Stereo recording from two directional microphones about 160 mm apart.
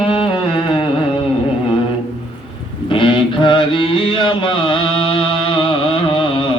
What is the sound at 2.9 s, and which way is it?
Music, 30° left (ahead or behind).